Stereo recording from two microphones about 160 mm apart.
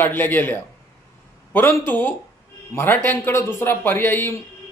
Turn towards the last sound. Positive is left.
turn(degrees=15)  # may be behind; listen again after turning